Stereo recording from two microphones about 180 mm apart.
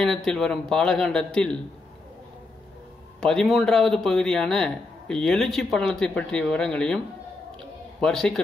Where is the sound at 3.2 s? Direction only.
5° left (ahead or behind).